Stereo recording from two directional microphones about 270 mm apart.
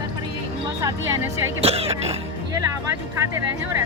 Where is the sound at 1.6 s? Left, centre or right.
Right.